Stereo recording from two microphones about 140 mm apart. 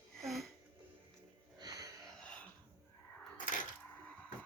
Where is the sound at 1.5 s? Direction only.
30° right (ahead or behind).